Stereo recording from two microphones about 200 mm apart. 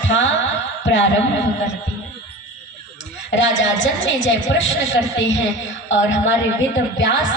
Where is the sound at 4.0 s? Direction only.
70° left (ahead or behind).